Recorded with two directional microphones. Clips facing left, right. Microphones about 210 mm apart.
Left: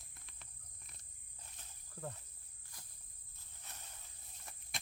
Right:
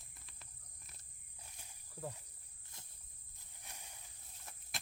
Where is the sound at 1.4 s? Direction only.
10° right (ahead or behind).